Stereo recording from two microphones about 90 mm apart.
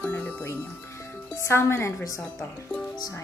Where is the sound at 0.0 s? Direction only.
15° left (ahead or behind).